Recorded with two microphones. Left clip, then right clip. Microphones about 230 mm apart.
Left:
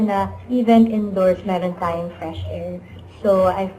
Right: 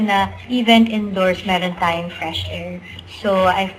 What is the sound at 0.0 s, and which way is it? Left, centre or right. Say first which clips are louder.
A woman's voice: right 3 dB; right.